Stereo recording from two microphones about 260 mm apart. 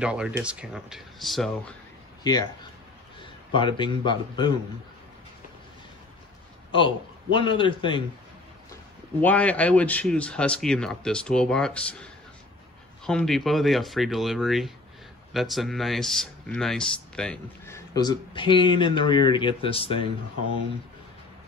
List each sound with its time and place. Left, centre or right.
0.0 s speech: centre
3.5 s a man's voice: centre
6.7 s a man's voice: centre
9.2 s a man's voice: centre; by 20.0 s left